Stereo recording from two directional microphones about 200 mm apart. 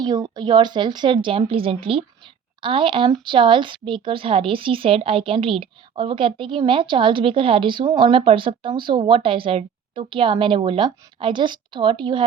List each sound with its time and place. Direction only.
0.0 s speech: 20° right (ahead or behind)